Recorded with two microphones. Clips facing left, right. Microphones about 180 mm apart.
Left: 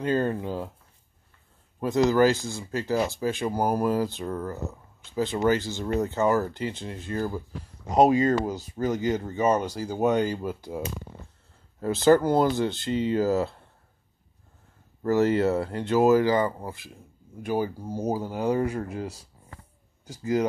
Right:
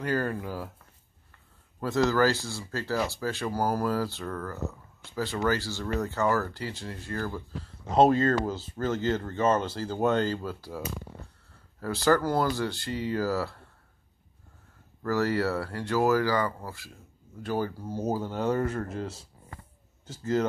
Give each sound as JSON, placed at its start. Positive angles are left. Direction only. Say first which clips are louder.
{"t": 0.0, "sound": "speech", "louder": "left 4 dB", "side_deg": 25}
{"t": 1.8, "sound": "speech", "louder": "left 4 dB", "side_deg": 20}
{"t": 15.0, "sound": "speech", "louder": "left 5 dB", "side_deg": 20}